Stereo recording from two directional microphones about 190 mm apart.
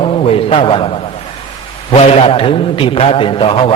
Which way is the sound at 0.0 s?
30° left (ahead or behind).